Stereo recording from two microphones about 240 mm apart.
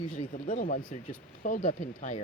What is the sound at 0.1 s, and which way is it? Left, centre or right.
Speech, left.